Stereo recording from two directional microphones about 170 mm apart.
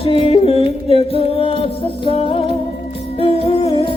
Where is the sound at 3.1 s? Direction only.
35° left (ahead or behind).